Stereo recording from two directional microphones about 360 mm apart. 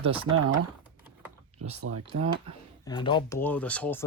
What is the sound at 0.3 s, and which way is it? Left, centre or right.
Speech, right.